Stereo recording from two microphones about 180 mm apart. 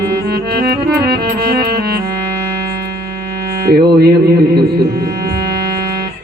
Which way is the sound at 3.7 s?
65° right (ahead or behind).